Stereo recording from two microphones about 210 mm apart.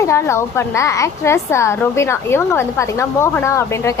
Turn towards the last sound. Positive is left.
turn(degrees=15)  # may be behind; listen again after turning